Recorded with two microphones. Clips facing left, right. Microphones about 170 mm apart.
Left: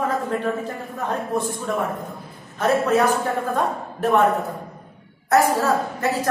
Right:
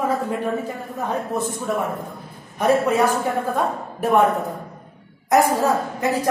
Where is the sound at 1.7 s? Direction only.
5° right (ahead or behind).